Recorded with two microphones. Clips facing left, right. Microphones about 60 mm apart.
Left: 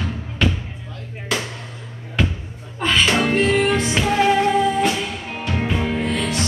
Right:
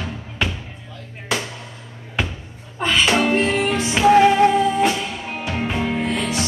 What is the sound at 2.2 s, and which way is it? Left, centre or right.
Basketball bounce, centre.